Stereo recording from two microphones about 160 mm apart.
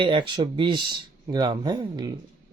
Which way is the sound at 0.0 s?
30° right (ahead or behind).